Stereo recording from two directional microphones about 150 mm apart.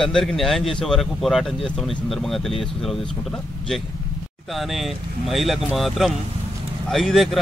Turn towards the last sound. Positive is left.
turn(degrees=0)  # may be behind; listen again after turning